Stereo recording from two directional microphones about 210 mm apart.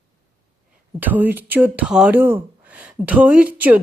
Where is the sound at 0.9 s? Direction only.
10° right (ahead or behind).